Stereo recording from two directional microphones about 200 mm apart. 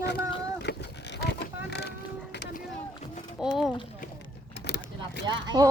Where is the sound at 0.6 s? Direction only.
55° left (ahead or behind).